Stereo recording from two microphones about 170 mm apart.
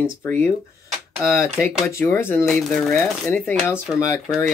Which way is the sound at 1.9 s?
15° left (ahead or behind).